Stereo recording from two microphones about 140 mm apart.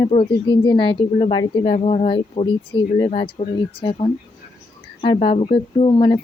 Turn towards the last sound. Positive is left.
turn(degrees=35)  # may be behind; listen again after turning